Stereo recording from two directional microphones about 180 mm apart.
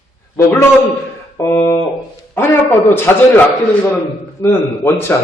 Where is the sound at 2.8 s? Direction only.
15° left (ahead or behind).